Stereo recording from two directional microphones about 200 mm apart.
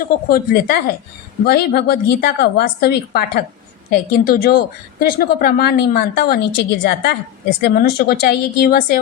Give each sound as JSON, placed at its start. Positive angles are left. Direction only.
{"t": 0.0, "sound": "a woman's voice", "side_deg": 45}